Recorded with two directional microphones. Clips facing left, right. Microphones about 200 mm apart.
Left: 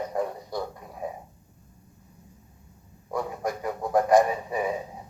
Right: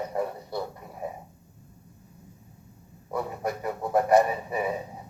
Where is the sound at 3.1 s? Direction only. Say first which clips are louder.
Left 1 dB; 5° right (ahead or behind).